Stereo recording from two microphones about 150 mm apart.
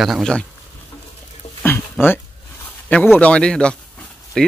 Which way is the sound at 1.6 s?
15° left (ahead or behind).